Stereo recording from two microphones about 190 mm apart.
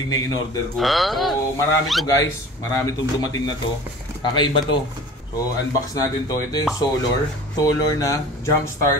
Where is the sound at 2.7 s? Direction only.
15° left (ahead or behind).